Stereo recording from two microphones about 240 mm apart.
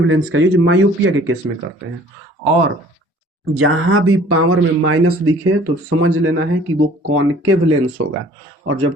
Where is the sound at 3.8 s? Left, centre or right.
Right.